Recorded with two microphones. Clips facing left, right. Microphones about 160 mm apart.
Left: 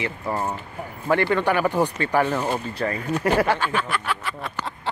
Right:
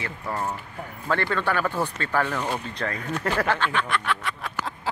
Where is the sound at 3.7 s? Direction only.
5° left (ahead or behind).